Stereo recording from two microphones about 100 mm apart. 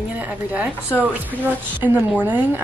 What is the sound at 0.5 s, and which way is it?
A woman's voice, 15° right (ahead or behind).